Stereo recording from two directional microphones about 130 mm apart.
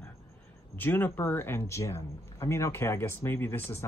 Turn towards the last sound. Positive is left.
turn(degrees=20)  # may be behind; listen again after turning